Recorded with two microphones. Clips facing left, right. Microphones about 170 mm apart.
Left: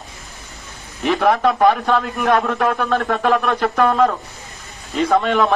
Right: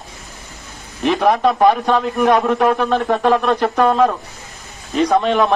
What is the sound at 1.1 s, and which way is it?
A man's voice, 15° right (ahead or behind).